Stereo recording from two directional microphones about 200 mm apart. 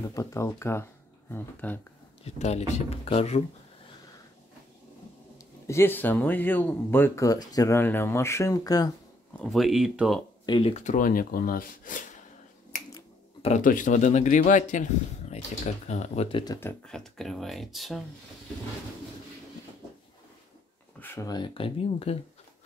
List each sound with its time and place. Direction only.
0.0 s speech: 15° left (ahead or behind)
2.2 s speech: 35° left (ahead or behind)
5.7 s speech: 10° left (ahead or behind)
9.4 s speech: centre (ahead or behind)
10.4 s speech: 25° left (ahead or behind); by 12.0 s 45° left (ahead or behind)
13.4 s speech: 40° left (ahead or behind)
16.5 s speech: 5° left (ahead or behind)
21.0 s speech: 15° left (ahead or behind); by 22.2 s 30° left (ahead or behind)